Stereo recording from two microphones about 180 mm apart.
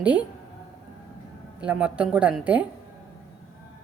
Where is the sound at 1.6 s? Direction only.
5° right (ahead or behind).